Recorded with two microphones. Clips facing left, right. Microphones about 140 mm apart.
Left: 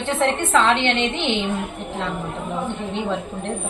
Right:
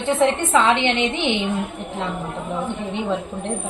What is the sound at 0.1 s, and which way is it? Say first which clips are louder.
A woman's voice: right 2 dB; 10° right (ahead or behind).